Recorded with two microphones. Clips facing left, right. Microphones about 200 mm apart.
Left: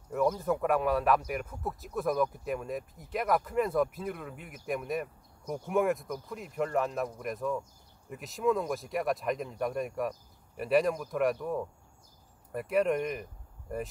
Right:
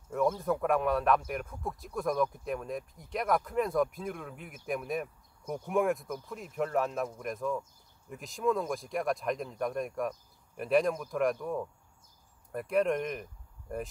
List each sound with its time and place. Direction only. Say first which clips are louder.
0.1 s speech: left 1 dB; centre (ahead or behind)
12.5 s speech: left 1 dB; centre (ahead or behind)